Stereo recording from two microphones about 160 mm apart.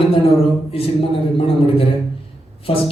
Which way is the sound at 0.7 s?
35° left (ahead or behind).